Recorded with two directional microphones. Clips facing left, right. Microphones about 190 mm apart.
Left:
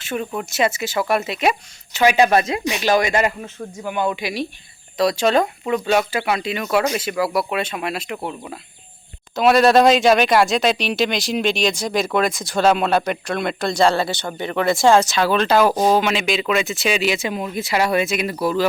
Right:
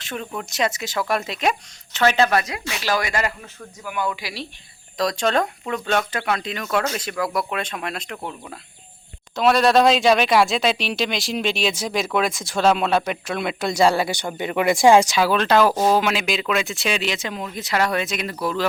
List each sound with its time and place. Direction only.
0.0 s speech: 5° left (ahead or behind)
4.9 s speech: 5° left (ahead or behind)
15.7 s speech: 15° left (ahead or behind)
16.0 s speech: centre (ahead or behind)